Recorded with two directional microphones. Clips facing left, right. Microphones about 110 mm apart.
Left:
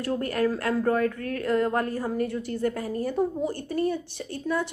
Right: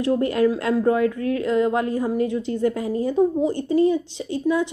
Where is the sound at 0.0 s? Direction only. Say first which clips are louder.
Right 6 dB; 20° right (ahead or behind).